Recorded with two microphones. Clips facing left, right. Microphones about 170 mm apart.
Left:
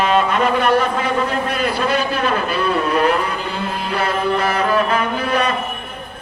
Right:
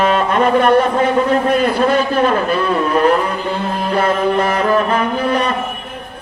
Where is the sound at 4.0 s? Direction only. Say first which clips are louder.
Right 4 dB; 50° right (ahead or behind).